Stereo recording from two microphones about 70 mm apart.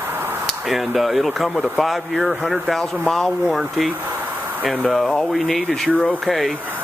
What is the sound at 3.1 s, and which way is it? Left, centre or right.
Speech, centre.